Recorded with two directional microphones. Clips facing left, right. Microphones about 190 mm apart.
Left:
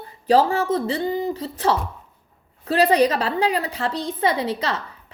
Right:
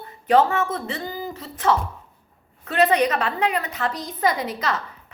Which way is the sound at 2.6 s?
35° left (ahead or behind).